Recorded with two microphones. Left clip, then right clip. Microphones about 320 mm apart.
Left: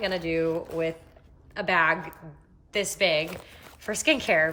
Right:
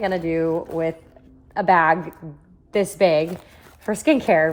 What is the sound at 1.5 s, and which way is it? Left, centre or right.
A woman's voice, centre.